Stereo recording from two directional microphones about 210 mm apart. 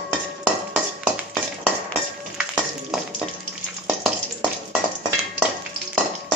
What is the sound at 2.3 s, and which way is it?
Music, 5° right (ahead or behind).